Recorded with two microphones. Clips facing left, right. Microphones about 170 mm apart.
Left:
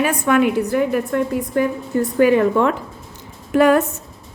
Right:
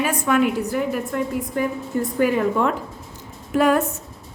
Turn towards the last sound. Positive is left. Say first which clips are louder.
# left 4 dB
turn(degrees=70)  # may be behind; listen again after turning